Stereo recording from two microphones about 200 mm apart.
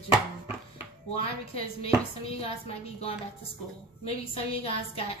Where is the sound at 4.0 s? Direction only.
30° left (ahead or behind).